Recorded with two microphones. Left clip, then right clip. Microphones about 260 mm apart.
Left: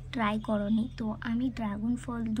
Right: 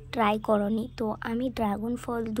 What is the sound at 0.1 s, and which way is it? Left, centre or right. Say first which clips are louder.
A woman's voice: right 6 dB; right.